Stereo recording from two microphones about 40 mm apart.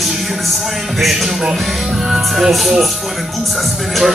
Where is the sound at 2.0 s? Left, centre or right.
Centre.